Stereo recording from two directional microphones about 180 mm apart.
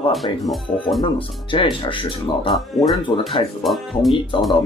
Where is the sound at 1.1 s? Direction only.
30° left (ahead or behind).